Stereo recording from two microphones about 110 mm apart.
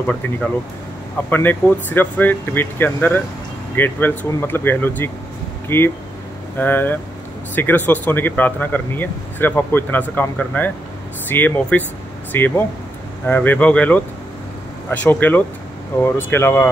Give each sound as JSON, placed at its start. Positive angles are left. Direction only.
{"t": 0.0, "sound": "speech", "side_deg": 10}